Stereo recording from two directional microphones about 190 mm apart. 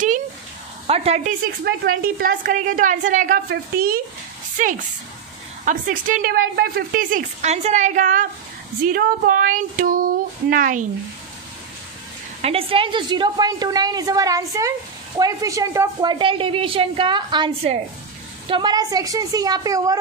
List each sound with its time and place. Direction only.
0.8 s speech: 30° right (ahead or behind)
1.6 s a woman's voice: 50° right (ahead or behind)
5.7 s a woman's voice: 45° right (ahead or behind)
12.4 s a woman's voice: 30° right (ahead or behind)